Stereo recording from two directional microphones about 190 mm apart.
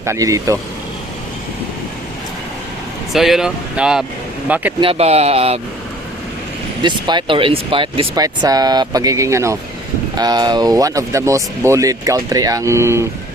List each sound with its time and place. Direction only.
0.0 s speech: 15° right (ahead or behind)
3.1 s speech: centre (ahead or behind)
4.8 s speech: 30° right (ahead or behind)
6.8 s speech: 25° right (ahead or behind)